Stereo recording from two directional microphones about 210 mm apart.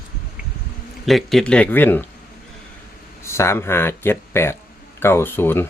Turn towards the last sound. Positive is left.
turn(degrees=10)  # may be behind; listen again after turning